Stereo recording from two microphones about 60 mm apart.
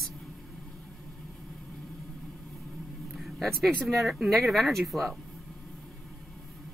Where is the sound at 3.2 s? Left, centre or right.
Centre.